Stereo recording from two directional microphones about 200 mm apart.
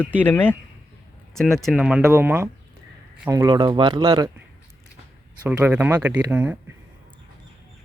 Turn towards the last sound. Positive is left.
turn(degrees=-10)  # may be behind; listen again after turning